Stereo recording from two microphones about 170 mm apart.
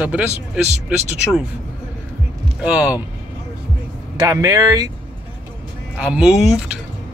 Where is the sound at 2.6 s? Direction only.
5° right (ahead or behind).